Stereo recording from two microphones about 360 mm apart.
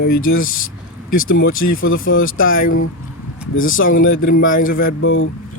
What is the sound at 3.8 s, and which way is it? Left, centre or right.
Speech, left.